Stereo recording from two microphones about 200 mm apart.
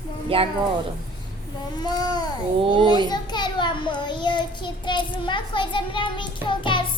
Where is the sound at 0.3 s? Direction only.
25° right (ahead or behind).